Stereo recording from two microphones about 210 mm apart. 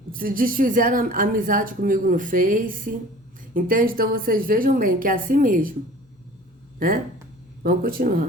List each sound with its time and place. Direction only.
0.1 s a woman's voice: 45° right (ahead or behind)
6.7 s speech: 40° right (ahead or behind)